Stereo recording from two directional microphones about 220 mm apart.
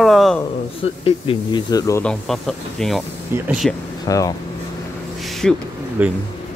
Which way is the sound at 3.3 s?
10° right (ahead or behind).